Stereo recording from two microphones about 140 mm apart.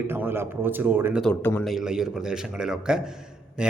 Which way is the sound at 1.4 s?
15° left (ahead or behind).